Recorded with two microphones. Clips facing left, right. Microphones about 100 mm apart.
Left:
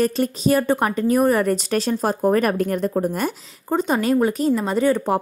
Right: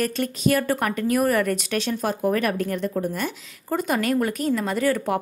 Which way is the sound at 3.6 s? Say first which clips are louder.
Left 4 dB; 25° left (ahead or behind).